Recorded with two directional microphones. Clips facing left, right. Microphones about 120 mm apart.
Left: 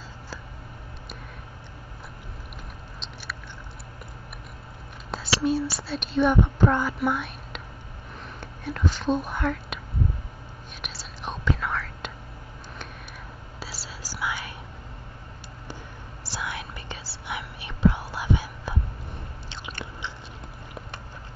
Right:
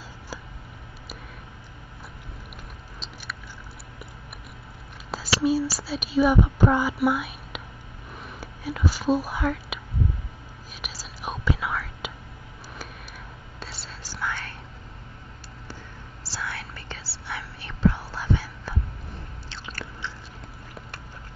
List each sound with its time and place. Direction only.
5.1 s speech: centre (ahead or behind)
8.2 s whispering: 5° right (ahead or behind)
10.8 s whispering: centre (ahead or behind)
13.6 s whispering: 5° left (ahead or behind)
16.3 s whispering: 15° left (ahead or behind)
19.5 s biting: 20° left (ahead or behind)